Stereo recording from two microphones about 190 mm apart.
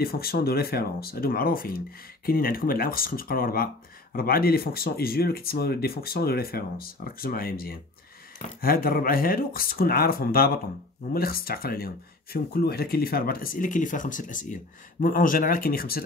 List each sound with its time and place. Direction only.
0.0 s speech: 50° left (ahead or behind)